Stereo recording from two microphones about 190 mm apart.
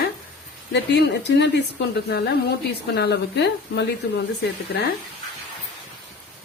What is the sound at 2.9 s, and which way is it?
Speech, 60° left (ahead or behind).